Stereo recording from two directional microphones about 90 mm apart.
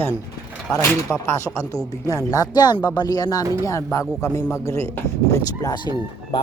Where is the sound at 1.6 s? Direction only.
40° left (ahead or behind).